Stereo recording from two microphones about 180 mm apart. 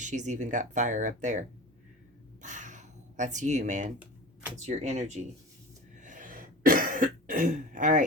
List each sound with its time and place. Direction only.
0.0 s speech: 40° right (ahead or behind)
2.4 s a sound: 45° right (ahead or behind)
4.0 s computer keyboard: 10° right (ahead or behind)
4.6 s speech: 40° right (ahead or behind)
6.0 s cough: 45° right (ahead or behind)